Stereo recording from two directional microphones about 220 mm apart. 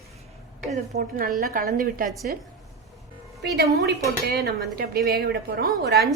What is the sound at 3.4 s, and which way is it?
A woman's voice, 45° right (ahead or behind).